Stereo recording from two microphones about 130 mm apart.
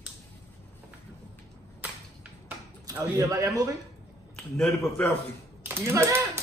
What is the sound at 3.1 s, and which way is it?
Speech, 25° right (ahead or behind).